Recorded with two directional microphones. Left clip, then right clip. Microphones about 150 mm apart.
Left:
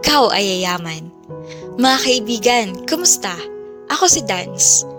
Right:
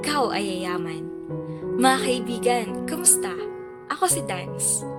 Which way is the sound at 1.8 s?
45° left (ahead or behind).